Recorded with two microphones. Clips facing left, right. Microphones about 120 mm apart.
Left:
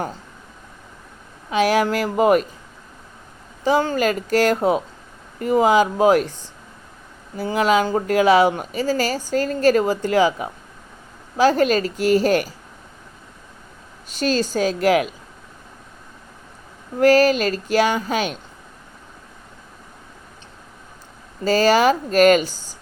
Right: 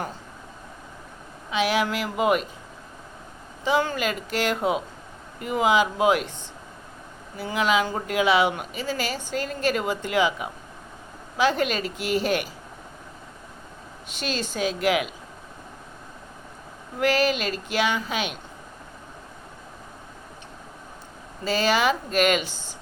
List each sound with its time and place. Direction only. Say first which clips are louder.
1.5 s speech: left 6 dB; 45° left (ahead or behind)
3.6 s speech: left 5 dB; 35° left (ahead or behind)
7.3 s speech: left 5 dB; 40° left (ahead or behind)
14.1 s speech: left 9 dB; 40° left (ahead or behind)
17.0 s speech: left 8 dB; 40° left (ahead or behind)
21.4 s speech: left 7 dB; 40° left (ahead or behind)